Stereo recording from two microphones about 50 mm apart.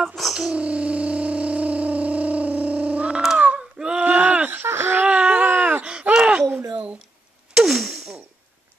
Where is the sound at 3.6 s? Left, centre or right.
Centre.